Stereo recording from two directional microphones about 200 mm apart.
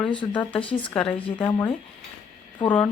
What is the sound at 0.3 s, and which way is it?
Speech, 5° left (ahead or behind).